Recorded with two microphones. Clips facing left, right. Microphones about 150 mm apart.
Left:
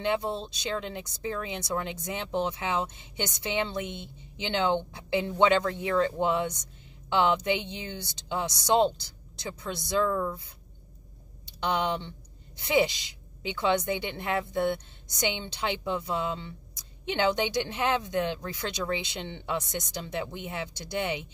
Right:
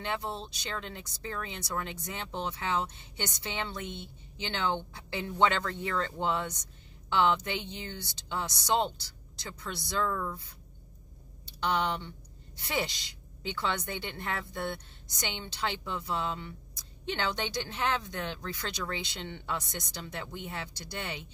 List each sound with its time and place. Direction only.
0.0 s a woman's voice: 20° left (ahead or behind)
11.6 s a woman's voice: 15° left (ahead or behind)